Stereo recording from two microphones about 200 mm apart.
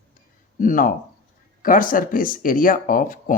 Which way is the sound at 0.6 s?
40° left (ahead or behind).